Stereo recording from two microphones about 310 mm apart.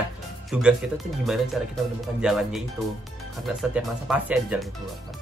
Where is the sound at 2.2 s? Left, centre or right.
Centre.